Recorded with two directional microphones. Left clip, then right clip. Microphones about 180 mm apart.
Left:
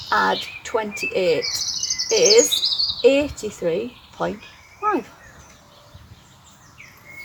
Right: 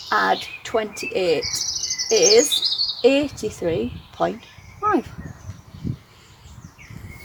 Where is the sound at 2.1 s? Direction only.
30° right (ahead or behind).